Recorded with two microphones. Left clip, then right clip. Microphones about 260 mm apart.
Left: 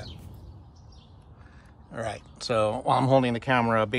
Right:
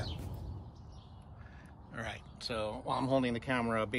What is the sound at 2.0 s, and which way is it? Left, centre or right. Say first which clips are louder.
Speech: left 9 dB; left.